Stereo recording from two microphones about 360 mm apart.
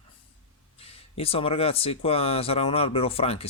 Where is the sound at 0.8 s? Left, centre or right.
Centre.